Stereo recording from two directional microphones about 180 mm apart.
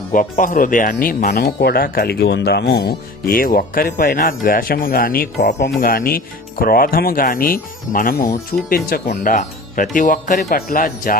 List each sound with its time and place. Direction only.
0.1 s speech: 50° left (ahead or behind)